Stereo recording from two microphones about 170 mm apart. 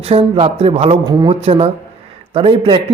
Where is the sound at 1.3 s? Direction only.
35° right (ahead or behind).